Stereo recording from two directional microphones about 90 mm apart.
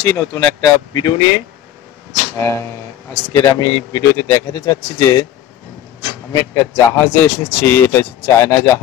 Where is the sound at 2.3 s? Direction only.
30° left (ahead or behind).